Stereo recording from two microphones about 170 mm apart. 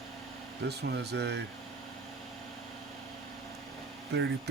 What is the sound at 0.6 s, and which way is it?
Speech, 80° right.